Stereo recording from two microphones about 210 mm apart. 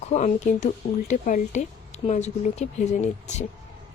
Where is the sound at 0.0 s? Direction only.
30° left (ahead or behind).